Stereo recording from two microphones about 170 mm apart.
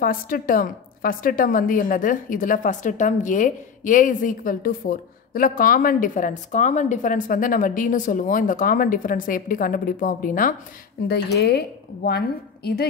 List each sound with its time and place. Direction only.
0.0 s a woman's voice: 55° left (ahead or behind)
11.1 s a woman's voice: 70° left (ahead or behind)